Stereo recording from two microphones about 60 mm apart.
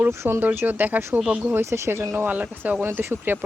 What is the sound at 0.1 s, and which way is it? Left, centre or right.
Speech, right.